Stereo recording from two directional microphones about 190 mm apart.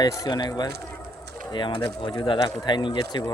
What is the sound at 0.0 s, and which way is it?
Speech, 20° left (ahead or behind).